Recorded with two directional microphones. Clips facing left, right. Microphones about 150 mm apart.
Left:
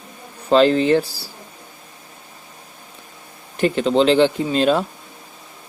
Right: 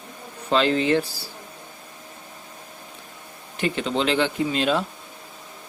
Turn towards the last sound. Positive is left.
turn(degrees=40)  # may be behind; listen again after turning